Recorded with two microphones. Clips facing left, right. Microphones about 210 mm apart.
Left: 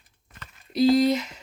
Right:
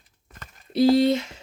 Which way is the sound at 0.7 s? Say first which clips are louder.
Right 1 dB; 30° right (ahead or behind).